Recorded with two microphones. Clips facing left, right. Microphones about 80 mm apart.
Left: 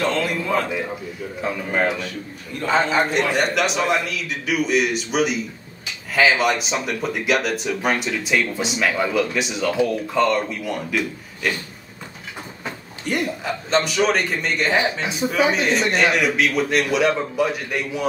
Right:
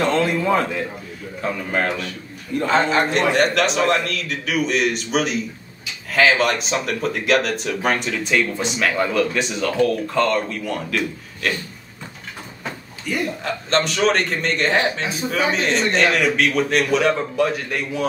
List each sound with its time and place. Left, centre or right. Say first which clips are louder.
0.1 s a man's voice: right 4 dB; right
1.4 s a man's voice: even; centre
13.4 s a man's voice: even; centre